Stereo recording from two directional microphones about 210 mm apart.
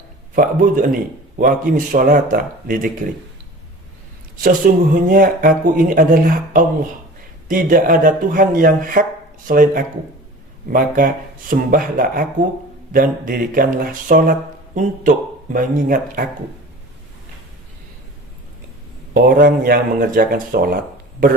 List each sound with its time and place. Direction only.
0.3 s speech: 40° right (ahead or behind)
4.4 s speech: 40° right (ahead or behind)
15.5 s speech: 40° right (ahead or behind)
19.1 s speech: 45° right (ahead or behind)